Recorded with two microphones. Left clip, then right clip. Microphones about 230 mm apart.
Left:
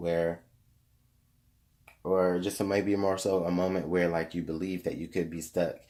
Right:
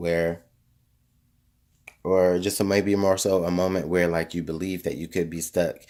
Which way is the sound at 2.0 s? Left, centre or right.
Right.